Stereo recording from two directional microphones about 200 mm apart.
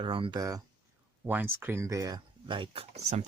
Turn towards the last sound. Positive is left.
turn(degrees=-35)  # may be behind; listen again after turning